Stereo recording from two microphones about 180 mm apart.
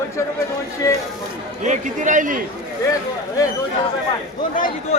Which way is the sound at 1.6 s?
45° right (ahead or behind).